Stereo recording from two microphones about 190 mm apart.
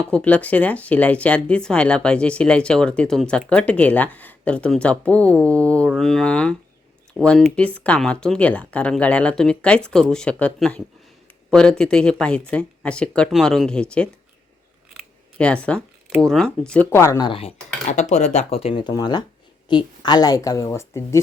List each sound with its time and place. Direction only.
0.0 s speech: 5° left (ahead or behind)
14.9 s scissors: 5° left (ahead or behind)
15.6 s a sound: 5° left (ahead or behind)
16.1 s speech: centre (ahead or behind)
16.9 s speech: 15° left (ahead or behind)
17.9 s speech: 40° left (ahead or behind); by 21.2 s 15° left (ahead or behind)